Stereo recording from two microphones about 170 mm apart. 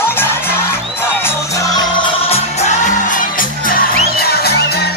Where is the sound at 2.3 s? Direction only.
40° left (ahead or behind).